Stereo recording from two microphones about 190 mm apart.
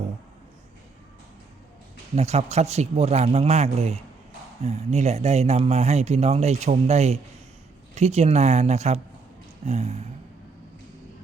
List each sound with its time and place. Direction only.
2.1 s speech: 35° right (ahead or behind)